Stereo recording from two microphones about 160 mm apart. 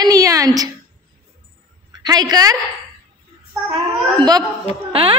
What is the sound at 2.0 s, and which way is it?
Speech, 25° right (ahead or behind).